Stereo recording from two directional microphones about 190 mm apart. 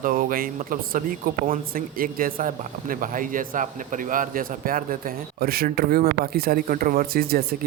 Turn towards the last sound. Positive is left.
turn(degrees=-50)  # may be behind; listen again after turning